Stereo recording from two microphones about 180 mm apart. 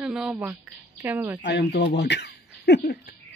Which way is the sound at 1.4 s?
65° left (ahead or behind).